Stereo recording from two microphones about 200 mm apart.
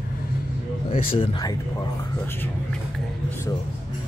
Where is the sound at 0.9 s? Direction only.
25° left (ahead or behind).